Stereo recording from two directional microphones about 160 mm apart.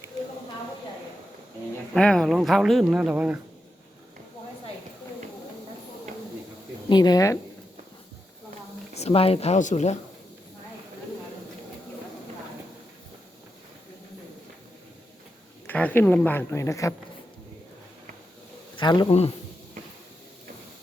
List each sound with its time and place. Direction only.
1.9 s speech: 5° left (ahead or behind)
6.8 s speech: 25° left (ahead or behind)
9.0 s a woman's voice: 40° left (ahead or behind)
15.6 s speech: 10° left (ahead or behind)
18.8 s a man's voice: 30° left (ahead or behind)